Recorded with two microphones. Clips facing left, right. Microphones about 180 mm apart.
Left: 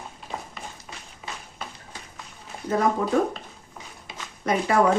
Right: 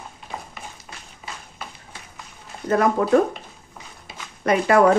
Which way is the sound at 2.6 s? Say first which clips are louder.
Right 4 dB; 70° right (ahead or behind).